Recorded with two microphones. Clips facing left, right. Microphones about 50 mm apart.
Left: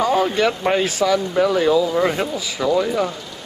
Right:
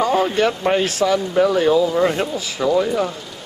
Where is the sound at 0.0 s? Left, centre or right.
Centre.